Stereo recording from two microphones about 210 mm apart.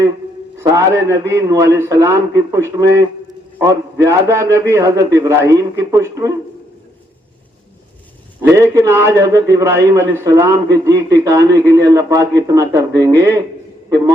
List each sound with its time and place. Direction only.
0.7 s a man's voice: 15° right (ahead or behind)
8.4 s a man's voice: 15° right (ahead or behind)